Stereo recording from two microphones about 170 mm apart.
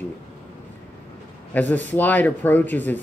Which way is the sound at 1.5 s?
10° left (ahead or behind).